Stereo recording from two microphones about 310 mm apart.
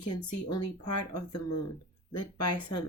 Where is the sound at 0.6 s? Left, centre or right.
Left.